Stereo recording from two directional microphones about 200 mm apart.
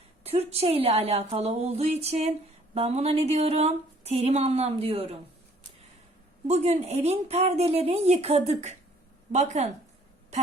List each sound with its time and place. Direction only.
0.3 s speech: 30° right (ahead or behind)
6.5 s speech: 35° right (ahead or behind)